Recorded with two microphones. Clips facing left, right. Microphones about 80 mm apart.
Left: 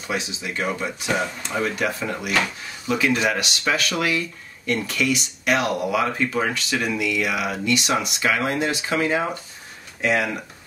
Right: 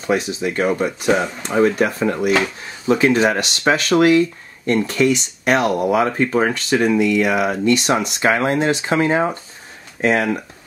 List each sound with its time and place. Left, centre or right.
0.0 s speech: right